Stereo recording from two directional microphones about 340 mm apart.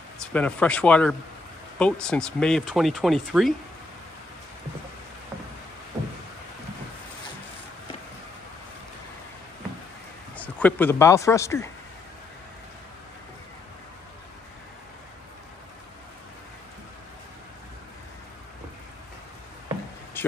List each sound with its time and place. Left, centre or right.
0.3 s speech: centre
10.3 s speech: centre
20.2 s a sound: centre